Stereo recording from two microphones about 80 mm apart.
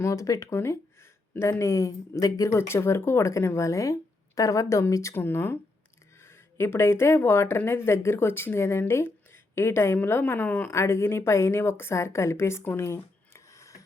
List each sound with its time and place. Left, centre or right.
0.0 s speech: left
5.1 s a woman's voice: left